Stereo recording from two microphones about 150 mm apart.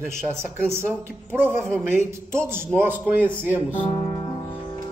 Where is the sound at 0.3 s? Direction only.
15° right (ahead or behind).